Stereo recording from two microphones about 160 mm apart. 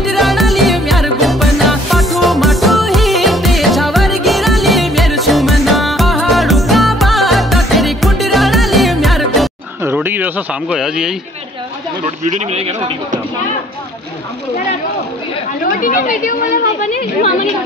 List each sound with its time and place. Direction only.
0.0 s music: centre (ahead or behind)
9.8 s speech: 10° right (ahead or behind)
12.3 s speech: 40° right (ahead or behind)
15.8 s speech: 55° left (ahead or behind)